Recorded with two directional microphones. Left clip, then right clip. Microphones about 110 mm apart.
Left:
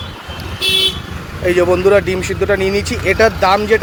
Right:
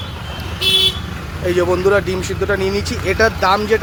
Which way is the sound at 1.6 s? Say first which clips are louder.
Left 3 dB; 10° left (ahead or behind).